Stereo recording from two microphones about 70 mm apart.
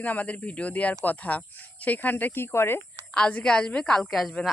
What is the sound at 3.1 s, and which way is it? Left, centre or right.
Speech, centre.